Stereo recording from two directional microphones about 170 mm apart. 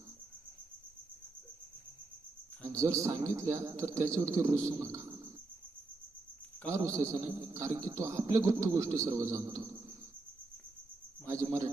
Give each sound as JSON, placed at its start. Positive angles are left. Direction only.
{"t": 2.6, "sound": "a man's voice", "side_deg": -20}
{"t": 6.7, "sound": "a man's voice", "side_deg": -15}
{"t": 11.3, "sound": "a man's voice", "side_deg": -20}